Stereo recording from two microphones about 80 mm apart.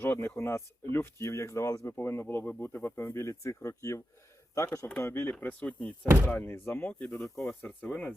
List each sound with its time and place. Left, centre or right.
0.0 s speech: left
5.0 s speech: left